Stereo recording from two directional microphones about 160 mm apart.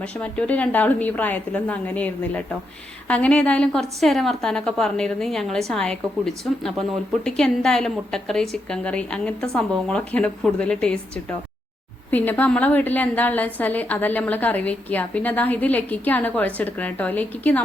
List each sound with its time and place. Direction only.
0.0 s a woman's voice: 5° left (ahead or behind)